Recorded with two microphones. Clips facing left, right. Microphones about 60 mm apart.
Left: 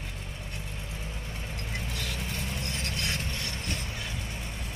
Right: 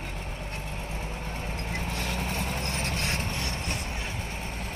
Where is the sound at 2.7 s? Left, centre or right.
Right.